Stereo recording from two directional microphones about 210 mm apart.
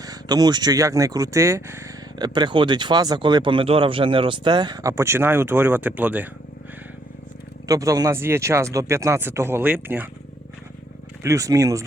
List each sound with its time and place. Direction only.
0.0 s speech: 15° right (ahead or behind)
7.7 s speech: 15° right (ahead or behind)
11.2 s speech: 15° right (ahead or behind)